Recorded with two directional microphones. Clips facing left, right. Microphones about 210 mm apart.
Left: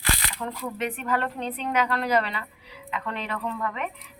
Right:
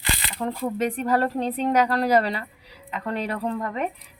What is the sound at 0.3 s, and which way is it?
Speech, 30° right (ahead or behind).